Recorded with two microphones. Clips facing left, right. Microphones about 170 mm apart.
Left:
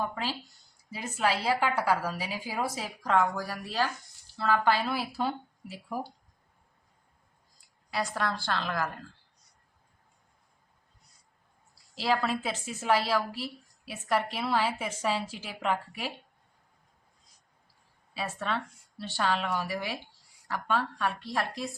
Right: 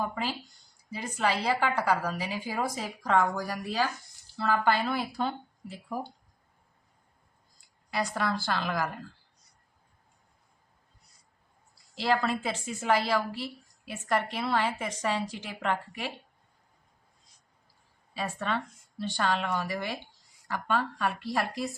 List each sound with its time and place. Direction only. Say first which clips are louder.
0.1 s a woman's voice: right 1 dB; centre (ahead or behind)
7.9 s a woman's voice: right 1 dB; centre (ahead or behind)
11.9 s a woman's voice: right 1 dB; 5° left (ahead or behind)
18.1 s a woman's voice: right 1 dB; 5° left (ahead or behind)